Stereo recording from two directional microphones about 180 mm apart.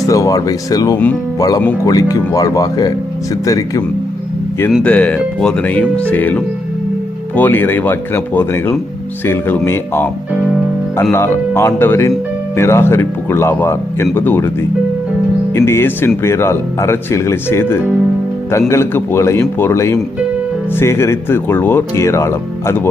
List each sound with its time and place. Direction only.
0.1 s speech: 20° left (ahead or behind)
4.7 s speech: 5° left (ahead or behind)
11.1 s speech: 15° left (ahead or behind)
15.5 s speech: 15° left (ahead or behind)